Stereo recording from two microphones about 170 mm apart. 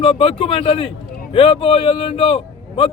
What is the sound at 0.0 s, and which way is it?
A man's voice, 30° left (ahead or behind).